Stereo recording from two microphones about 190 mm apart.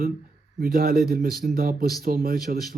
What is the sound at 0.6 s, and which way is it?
Speech, 50° right (ahead or behind).